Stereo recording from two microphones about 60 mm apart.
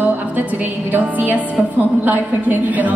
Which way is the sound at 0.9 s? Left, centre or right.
Right.